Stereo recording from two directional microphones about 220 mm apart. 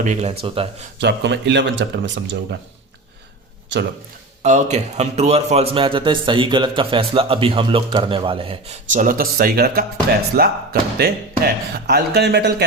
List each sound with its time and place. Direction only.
0.0 s speech: 30° right (ahead or behind)
0.9 s speech: 50° right (ahead or behind)
3.7 s speech: 55° right (ahead or behind)
4.4 s speech: 30° right (ahead or behind); by 12.6 s 50° right (ahead or behind)